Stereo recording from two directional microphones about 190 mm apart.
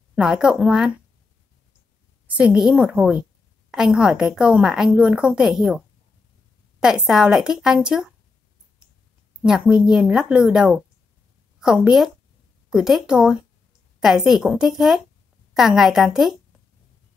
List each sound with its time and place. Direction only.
0.1 s a woman's voice: centre (ahead or behind)
2.2 s a woman's voice: 5° right (ahead or behind)
9.4 s a woman's voice: 5° right (ahead or behind)